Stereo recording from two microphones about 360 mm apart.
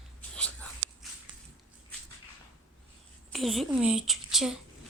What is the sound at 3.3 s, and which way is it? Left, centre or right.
A woman's voice, centre.